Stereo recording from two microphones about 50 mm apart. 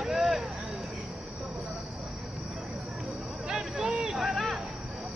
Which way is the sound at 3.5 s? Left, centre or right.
Centre.